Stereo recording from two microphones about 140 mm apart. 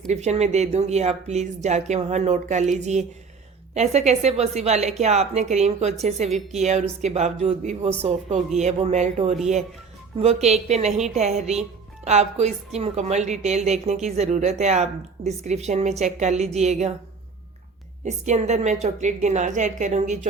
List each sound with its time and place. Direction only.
0.1 s a woman's voice: 50° right (ahead or behind)
18.0 s a woman's voice: 55° right (ahead or behind)